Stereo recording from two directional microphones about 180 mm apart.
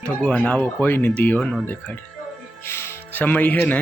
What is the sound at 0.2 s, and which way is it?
Speech, 5° left (ahead or behind).